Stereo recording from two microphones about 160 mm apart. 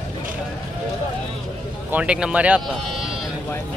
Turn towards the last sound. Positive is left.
turn(degrees=-5)  # may be behind; listen again after turning